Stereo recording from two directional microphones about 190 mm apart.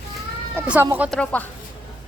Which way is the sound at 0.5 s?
10° right (ahead or behind).